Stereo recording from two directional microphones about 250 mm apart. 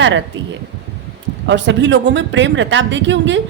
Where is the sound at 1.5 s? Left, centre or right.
Right.